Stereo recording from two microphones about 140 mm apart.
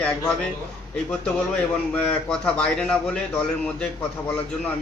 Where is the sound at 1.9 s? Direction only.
10° left (ahead or behind).